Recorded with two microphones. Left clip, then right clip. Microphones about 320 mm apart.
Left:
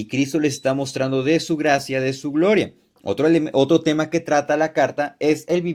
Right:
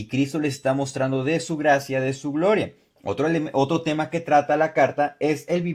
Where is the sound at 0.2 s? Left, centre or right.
Centre.